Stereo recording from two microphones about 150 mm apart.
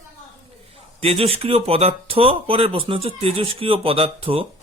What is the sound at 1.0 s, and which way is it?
Speech, 40° right (ahead or behind).